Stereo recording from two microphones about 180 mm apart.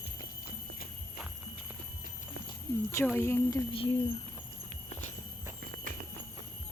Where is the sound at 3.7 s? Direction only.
30° left (ahead or behind).